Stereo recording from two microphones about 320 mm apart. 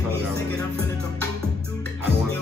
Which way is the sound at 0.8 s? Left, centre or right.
Centre.